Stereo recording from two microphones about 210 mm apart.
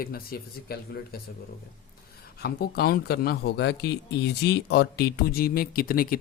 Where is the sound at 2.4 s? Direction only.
45° left (ahead or behind).